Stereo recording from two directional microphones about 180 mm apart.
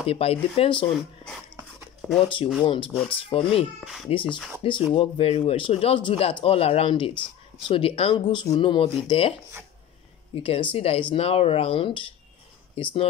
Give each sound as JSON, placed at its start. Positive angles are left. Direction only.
{"t": 0.0, "sound": "speech", "side_deg": 35}
{"t": 2.0, "sound": "a sound", "side_deg": 0}
{"t": 2.2, "sound": "speech", "side_deg": 30}
{"t": 3.8, "sound": "speech", "side_deg": 0}
{"t": 4.6, "sound": "speech", "side_deg": 25}
{"t": 10.3, "sound": "speech", "side_deg": 30}